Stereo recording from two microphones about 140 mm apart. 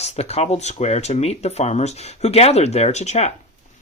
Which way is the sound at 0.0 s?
50° left (ahead or behind).